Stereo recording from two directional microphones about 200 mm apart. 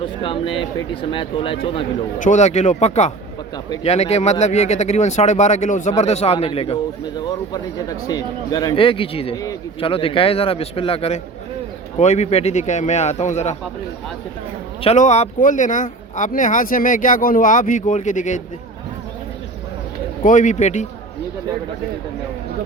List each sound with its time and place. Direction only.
0.0 s speech: 25° left (ahead or behind)
2.1 s speech: 40° left (ahead or behind)
7.2 s speech: 20° left (ahead or behind)
9.4 s a man's voice: 15° left (ahead or behind)
9.9 s speech: 25° left (ahead or behind)
14.8 s speech: 35° left (ahead or behind)
20.2 s speech: 40° left (ahead or behind)